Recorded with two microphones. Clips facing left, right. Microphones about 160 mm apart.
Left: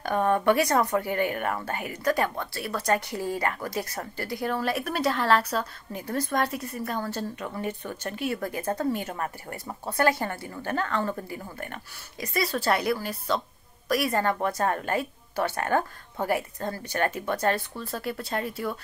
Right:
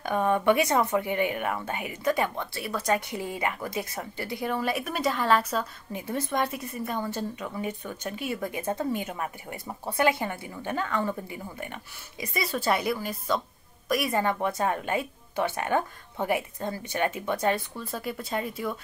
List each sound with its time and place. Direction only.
0.1 s a woman's voice: 10° right (ahead or behind)
14.1 s a woman's voice: 10° right (ahead or behind)
15.5 s a woman's voice: 10° right (ahead or behind)